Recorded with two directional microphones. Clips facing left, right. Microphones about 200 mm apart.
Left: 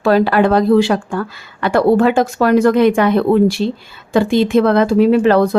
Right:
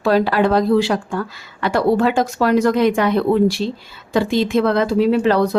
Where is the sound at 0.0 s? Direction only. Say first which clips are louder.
Left 3 dB; 60° left (ahead or behind).